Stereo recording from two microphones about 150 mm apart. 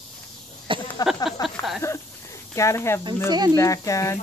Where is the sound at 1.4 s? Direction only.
25° left (ahead or behind).